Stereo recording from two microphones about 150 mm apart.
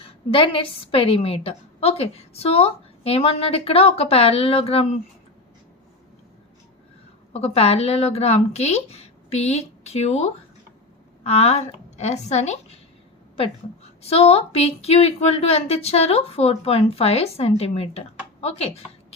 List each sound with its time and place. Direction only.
0.0 s a woman's voice: 40° left (ahead or behind)
7.3 s a woman's voice: 40° left (ahead or behind)
14.0 s a woman's voice: 40° left (ahead or behind)